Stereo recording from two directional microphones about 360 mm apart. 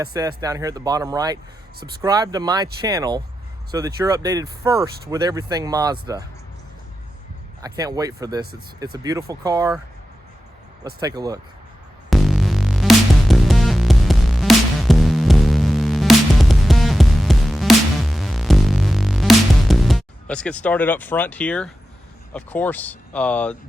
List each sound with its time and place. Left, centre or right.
0.0 s speech: centre
7.6 s speech: centre
11.0 s speech: centre
12.1 s music: centre
22.3 s speech: centre